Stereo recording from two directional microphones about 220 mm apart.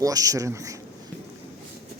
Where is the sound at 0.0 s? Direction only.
15° right (ahead or behind).